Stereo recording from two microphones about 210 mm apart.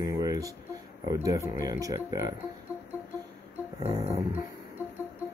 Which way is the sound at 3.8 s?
25° right (ahead or behind).